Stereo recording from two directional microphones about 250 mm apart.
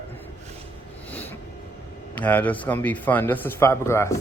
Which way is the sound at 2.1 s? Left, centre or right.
Centre.